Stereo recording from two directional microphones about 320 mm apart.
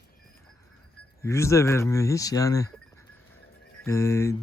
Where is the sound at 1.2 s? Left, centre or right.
Centre.